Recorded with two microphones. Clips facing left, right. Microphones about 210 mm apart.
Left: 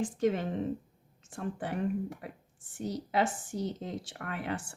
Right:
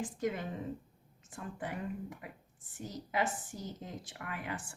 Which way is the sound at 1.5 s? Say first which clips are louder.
Left 7 dB; 30° left (ahead or behind).